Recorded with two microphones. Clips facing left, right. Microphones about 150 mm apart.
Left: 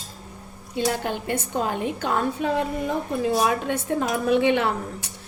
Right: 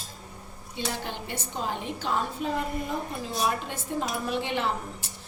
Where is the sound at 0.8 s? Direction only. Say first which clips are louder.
Left 8 dB; 50° left (ahead or behind).